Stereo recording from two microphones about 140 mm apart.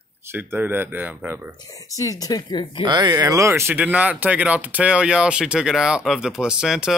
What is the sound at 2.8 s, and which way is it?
Speech, 30° right (ahead or behind).